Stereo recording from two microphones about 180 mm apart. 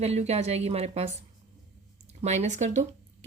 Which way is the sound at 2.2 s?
40° right (ahead or behind).